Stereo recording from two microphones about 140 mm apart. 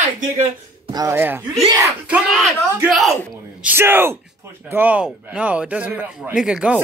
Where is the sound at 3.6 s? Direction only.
15° right (ahead or behind).